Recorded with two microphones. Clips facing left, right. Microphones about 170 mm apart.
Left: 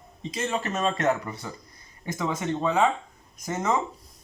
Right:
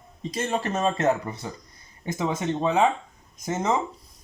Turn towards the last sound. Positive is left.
turn(degrees=-20)  # may be behind; listen again after turning